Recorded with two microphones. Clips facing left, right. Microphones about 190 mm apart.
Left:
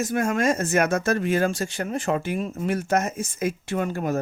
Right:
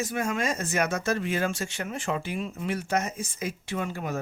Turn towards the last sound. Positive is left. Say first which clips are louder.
# left 6 dB
turn(degrees=45)  # may be behind; listen again after turning